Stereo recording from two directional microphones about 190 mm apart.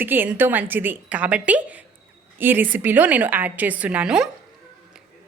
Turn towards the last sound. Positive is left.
turn(degrees=-5)  # may be behind; listen again after turning